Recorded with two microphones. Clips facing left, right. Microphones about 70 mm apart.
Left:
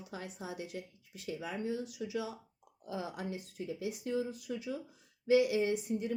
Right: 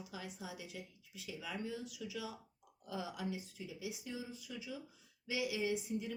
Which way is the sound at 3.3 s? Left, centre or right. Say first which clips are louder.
Left 6 dB; left.